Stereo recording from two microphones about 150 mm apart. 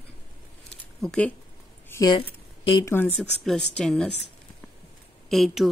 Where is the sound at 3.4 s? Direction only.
5° left (ahead or behind).